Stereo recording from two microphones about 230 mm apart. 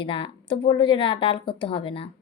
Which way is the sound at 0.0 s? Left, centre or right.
Left.